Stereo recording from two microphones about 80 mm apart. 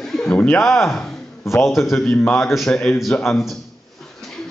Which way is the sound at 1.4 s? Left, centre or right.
Left.